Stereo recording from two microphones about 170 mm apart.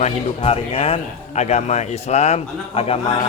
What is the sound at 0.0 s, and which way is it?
A man's voice, 35° left (ahead or behind).